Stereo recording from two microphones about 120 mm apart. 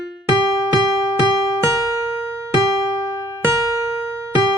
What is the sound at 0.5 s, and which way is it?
Music, 30° left (ahead or behind).